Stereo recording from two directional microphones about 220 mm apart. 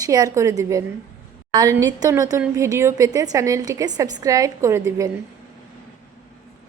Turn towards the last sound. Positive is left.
turn(degrees=-15)  # may be behind; listen again after turning